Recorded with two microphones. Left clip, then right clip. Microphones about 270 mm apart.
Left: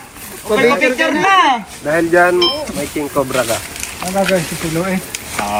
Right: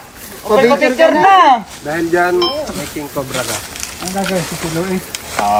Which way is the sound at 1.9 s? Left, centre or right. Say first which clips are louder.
Left 3 dB; centre.